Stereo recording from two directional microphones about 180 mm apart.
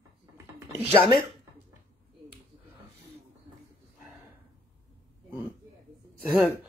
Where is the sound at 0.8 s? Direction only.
30° right (ahead or behind).